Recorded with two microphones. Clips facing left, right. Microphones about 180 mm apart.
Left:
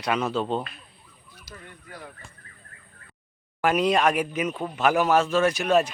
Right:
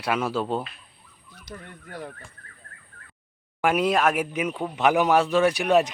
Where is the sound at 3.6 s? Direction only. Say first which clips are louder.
Even; 10° right (ahead or behind).